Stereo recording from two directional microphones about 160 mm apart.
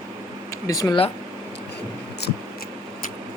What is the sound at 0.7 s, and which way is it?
Speech, 20° left (ahead or behind).